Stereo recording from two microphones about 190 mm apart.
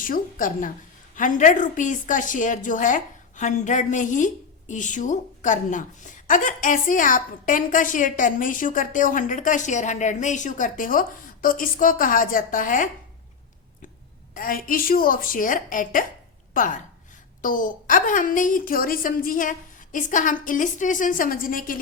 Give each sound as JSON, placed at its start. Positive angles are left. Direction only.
{"t": 0.0, "sound": "a woman's voice", "side_deg": 45}
{"t": 14.3, "sound": "a woman's voice", "side_deg": 50}